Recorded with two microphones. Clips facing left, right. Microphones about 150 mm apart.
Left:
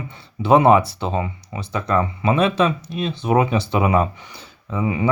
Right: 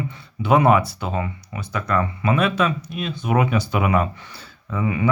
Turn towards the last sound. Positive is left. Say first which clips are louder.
# left 1 dB
turn(degrees=25)  # may be behind; listen again after turning